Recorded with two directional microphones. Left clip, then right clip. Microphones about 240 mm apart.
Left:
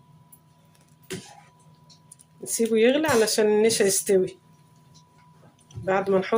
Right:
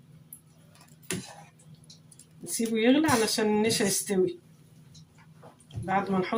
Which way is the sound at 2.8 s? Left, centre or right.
Left.